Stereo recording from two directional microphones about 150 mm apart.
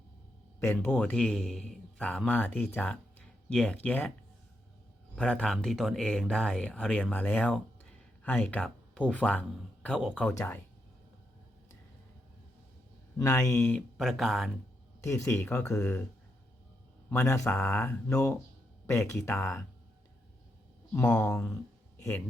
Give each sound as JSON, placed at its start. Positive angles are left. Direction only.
{"t": 0.6, "sound": "a man's voice", "side_deg": 15}
{"t": 5.1, "sound": "speech", "side_deg": 5}
{"t": 10.3, "sound": "speech", "side_deg": 15}
{"t": 13.2, "sound": "speech", "side_deg": 20}
{"t": 13.9, "sound": "speech", "side_deg": 0}
{"t": 15.0, "sound": "speech", "side_deg": 20}
{"t": 17.1, "sound": "speech", "side_deg": 15}
{"t": 21.0, "sound": "speech", "side_deg": 10}